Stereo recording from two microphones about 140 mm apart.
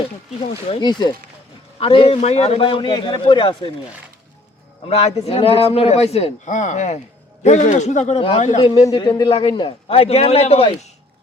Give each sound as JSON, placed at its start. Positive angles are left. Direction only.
{"t": 0.7, "sound": "a man's voice", "side_deg": 30}
{"t": 1.8, "sound": "a man's voice", "side_deg": 40}
{"t": 4.9, "sound": "a man's voice", "side_deg": 45}